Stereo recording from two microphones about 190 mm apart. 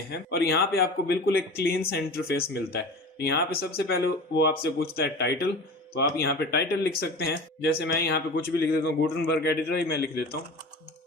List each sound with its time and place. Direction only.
0.1 s speech: 55° left (ahead or behind)